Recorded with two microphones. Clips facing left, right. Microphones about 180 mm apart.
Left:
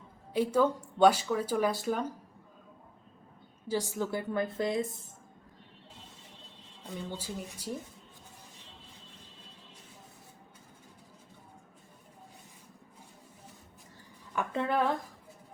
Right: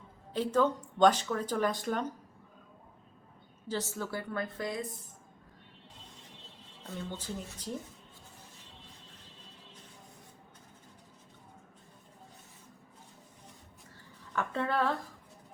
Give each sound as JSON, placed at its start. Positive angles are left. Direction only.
{"t": 0.3, "sound": "speech", "side_deg": 10}
{"t": 3.7, "sound": "a woman's voice", "side_deg": 15}
{"t": 6.8, "sound": "speech", "side_deg": 15}
{"t": 14.3, "sound": "speech", "side_deg": 15}